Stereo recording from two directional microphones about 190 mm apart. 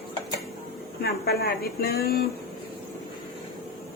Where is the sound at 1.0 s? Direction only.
55° left (ahead or behind).